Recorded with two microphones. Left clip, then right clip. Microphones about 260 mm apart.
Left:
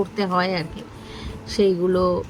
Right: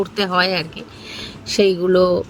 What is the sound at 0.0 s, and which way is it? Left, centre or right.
Speech, centre.